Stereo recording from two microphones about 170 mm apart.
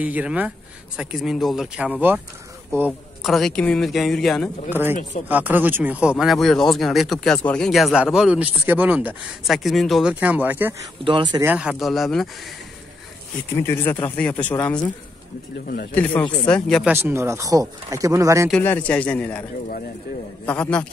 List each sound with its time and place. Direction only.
0.0 s speech: 10° right (ahead or behind)
3.3 s speech: centre (ahead or behind)
4.6 s speech: 10° right (ahead or behind)
13.6 s speech: 15° left (ahead or behind)
15.5 s speech: 70° left (ahead or behind)
15.9 s speech: 10° left (ahead or behind)
16.8 s speech: 15° right (ahead or behind)
18.5 s speech: 10° left (ahead or behind)
20.4 s speech: 10° left (ahead or behind)